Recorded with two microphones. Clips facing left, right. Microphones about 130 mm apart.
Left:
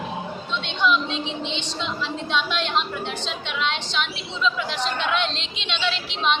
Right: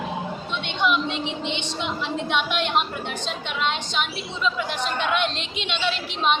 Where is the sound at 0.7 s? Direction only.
55° right (ahead or behind).